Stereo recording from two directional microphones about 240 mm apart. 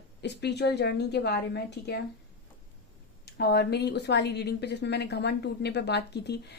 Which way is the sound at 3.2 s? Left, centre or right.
Left.